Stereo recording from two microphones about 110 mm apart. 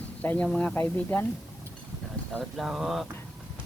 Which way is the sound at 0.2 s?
15° left (ahead or behind).